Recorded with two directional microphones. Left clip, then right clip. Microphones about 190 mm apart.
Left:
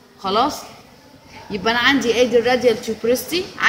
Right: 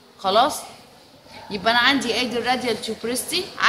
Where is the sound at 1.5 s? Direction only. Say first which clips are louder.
Left 1 dB; 15° right (ahead or behind).